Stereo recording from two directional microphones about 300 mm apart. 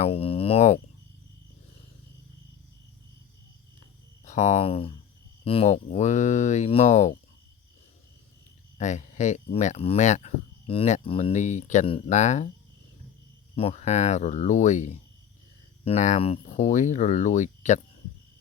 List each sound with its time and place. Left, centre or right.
0.0 s speech: centre
4.3 s speech: left
8.8 s speech: left
13.6 s speech: centre